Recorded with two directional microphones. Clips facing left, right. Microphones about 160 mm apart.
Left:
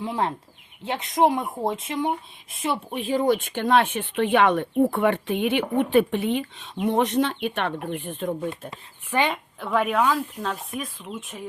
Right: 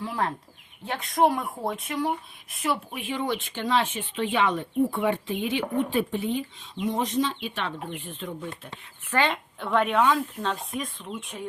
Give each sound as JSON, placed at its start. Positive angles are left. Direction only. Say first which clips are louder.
{"t": 0.0, "sound": "speech", "louder": "left 3 dB", "side_deg": 20}
{"t": 9.0, "sound": "speech", "louder": "left 1 dB", "side_deg": 15}
{"t": 9.6, "sound": "speech", "louder": "even", "side_deg": 0}